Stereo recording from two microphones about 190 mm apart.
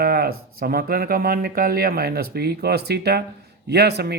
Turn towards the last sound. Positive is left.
turn(degrees=-60)  # may be behind; listen again after turning